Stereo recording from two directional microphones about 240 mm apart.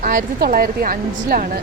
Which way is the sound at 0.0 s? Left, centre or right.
Right.